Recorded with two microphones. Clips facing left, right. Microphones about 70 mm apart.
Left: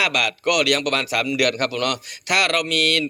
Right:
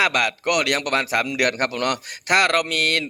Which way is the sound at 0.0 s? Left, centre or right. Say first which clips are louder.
Right 1 dB; right.